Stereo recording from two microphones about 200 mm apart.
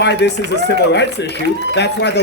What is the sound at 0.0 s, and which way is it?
A man's voice, 60° left (ahead or behind).